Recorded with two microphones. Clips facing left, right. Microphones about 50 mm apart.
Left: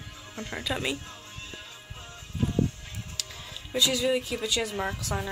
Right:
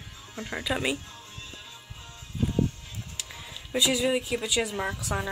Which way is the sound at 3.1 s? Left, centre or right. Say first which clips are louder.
Even; centre.